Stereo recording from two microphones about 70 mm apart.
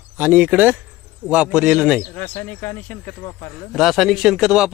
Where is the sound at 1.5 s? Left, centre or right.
Centre.